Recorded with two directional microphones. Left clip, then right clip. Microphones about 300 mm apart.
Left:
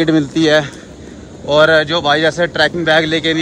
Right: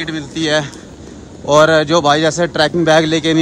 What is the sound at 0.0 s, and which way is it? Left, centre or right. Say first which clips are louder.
A man's voice: left 7 dB; centre.